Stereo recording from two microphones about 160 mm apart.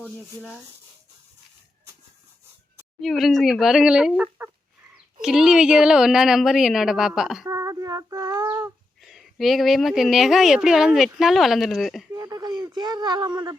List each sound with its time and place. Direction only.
3.0 s speech: centre (ahead or behind)
4.4 s chicken: 15° right (ahead or behind)
5.2 s speech: 5° right (ahead or behind)
7.4 s female singing: 20° right (ahead or behind)
9.0 s speech: centre (ahead or behind)
12.1 s speech: 20° right (ahead or behind)